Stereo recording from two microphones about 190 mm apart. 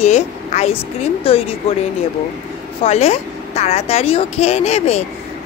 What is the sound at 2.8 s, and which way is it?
Speech, 35° left (ahead or behind).